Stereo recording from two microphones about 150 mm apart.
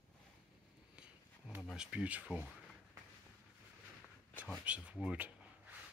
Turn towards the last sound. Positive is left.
turn(degrees=-10)  # may be behind; listen again after turning